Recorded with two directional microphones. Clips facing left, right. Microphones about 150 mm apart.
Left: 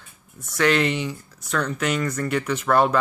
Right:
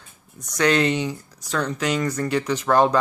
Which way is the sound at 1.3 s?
35° right (ahead or behind).